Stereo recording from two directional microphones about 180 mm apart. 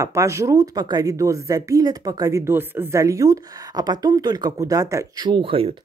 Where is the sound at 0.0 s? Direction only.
15° right (ahead or behind).